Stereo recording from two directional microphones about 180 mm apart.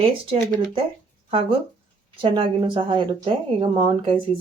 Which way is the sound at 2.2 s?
30° right (ahead or behind).